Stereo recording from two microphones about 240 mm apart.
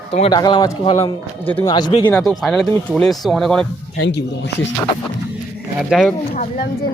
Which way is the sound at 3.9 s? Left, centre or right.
Left.